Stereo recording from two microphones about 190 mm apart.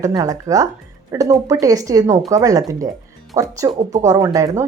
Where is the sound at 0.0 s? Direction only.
20° right (ahead or behind).